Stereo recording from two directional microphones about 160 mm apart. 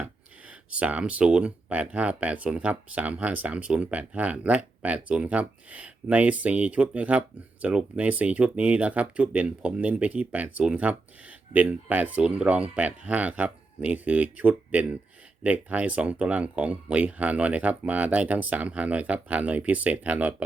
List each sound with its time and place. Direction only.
0.0 s speech: 5° right (ahead or behind)